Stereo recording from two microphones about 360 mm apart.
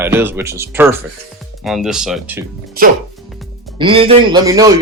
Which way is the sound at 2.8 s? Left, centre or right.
Right.